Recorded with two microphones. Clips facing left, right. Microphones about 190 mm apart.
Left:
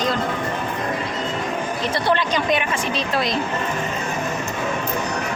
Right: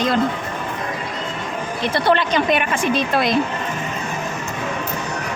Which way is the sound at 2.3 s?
60° right (ahead or behind).